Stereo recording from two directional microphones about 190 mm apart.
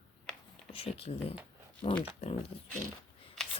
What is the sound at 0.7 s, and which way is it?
Speech, 30° left (ahead or behind).